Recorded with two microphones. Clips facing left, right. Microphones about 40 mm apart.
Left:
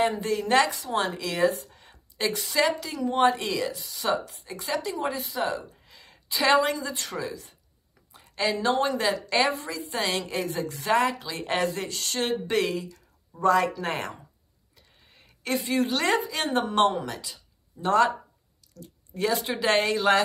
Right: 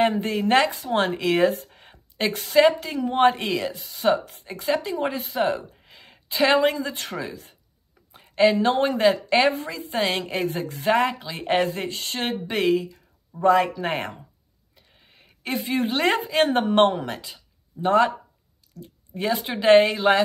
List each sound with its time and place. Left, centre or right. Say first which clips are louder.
0.0 s speech: right 4 dB; right
15.0 s a sound: right 2 dB; centre
15.4 s a woman's voice: right 1 dB; right